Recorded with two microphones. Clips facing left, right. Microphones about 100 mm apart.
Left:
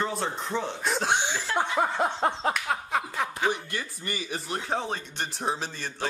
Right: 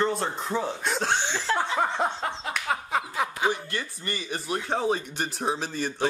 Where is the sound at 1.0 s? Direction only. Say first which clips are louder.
Right 3 dB; 15° left (ahead or behind).